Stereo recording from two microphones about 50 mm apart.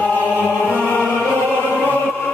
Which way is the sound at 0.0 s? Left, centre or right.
Left.